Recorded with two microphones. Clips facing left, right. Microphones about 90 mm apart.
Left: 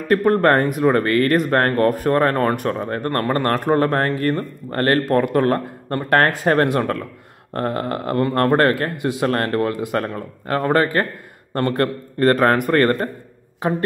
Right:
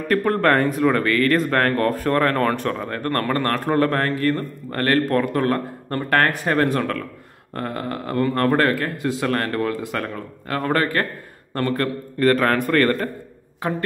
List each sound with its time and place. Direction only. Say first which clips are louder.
0.3 s a man's voice: left 2 dB; 30° left (ahead or behind)
2.4 s a man's voice: left 2 dB; 15° left (ahead or behind)
11.5 s a man's voice: left 3 dB; 35° left (ahead or behind)